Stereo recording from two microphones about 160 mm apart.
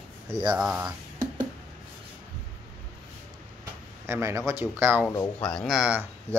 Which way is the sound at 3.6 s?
15° right (ahead or behind).